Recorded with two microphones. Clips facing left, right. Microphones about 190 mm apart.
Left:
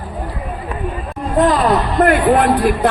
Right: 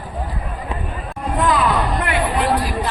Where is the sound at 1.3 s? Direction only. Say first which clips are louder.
Left 5 dB; 45° left (ahead or behind).